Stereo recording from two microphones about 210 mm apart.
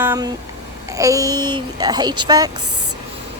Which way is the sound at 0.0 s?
15° right (ahead or behind).